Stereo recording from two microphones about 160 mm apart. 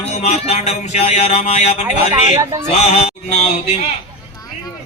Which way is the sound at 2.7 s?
40° left (ahead or behind).